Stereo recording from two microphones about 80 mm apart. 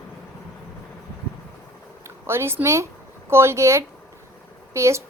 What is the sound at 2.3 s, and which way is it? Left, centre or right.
A woman's voice, right.